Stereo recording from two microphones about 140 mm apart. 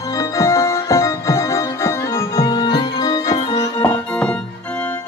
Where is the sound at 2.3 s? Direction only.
30° left (ahead or behind).